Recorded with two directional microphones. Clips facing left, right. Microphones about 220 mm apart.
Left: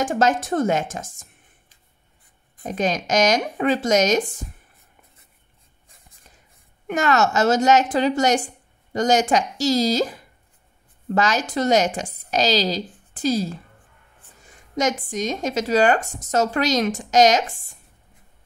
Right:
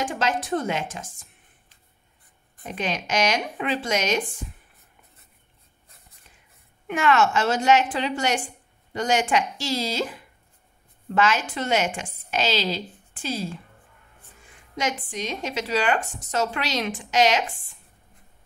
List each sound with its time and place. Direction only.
0.0 s speech: 45° left (ahead or behind)
6.9 s a woman's voice: 40° left (ahead or behind)
14.8 s speech: 45° left (ahead or behind)